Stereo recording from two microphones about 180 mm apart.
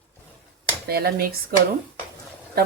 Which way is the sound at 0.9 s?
60° right (ahead or behind).